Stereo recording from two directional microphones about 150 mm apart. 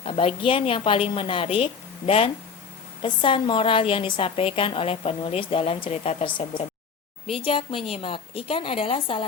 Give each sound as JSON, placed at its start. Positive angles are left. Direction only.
{"t": 0.0, "sound": "a woman's voice", "side_deg": 40}